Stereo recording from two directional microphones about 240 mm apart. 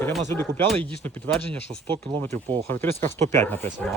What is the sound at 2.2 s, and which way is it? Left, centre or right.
Speech, centre.